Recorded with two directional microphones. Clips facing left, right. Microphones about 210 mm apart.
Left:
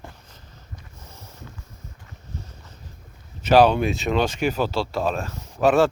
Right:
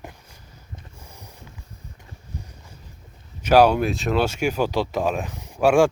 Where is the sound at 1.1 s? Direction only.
15° right (ahead or behind).